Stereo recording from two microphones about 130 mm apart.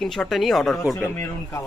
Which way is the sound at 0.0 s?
Centre (ahead or behind).